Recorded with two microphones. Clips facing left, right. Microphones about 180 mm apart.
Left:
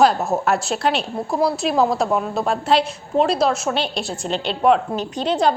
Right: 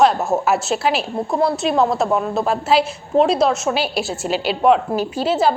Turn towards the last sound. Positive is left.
turn(degrees=-5)  # may be behind; listen again after turning